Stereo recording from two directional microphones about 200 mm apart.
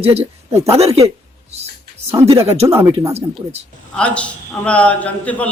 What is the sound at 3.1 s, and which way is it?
Speech, 30° right (ahead or behind).